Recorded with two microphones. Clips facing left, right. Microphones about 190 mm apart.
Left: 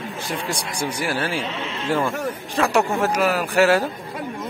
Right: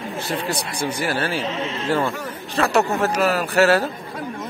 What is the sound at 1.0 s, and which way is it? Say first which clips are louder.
Speech: right 1 dB; 10° left (ahead or behind).